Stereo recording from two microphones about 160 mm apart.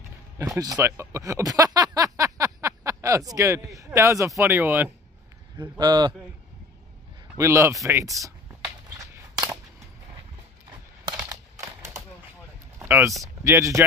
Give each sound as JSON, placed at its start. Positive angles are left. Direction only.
{"t": 0.4, "sound": "speech", "side_deg": -25}
{"t": 5.6, "sound": "speech", "side_deg": -25}
{"t": 7.3, "sound": "speech", "side_deg": -20}
{"t": 8.9, "sound": "a sound", "side_deg": -20}
{"t": 11.2, "sound": "a sound", "side_deg": -20}
{"t": 13.2, "sound": "speech", "side_deg": -20}